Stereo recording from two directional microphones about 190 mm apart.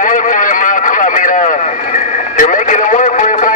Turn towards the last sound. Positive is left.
turn(degrees=40)  # may be behind; listen again after turning